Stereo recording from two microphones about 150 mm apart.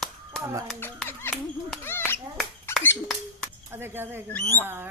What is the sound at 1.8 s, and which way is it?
Finger snapping, 15° left (ahead or behind).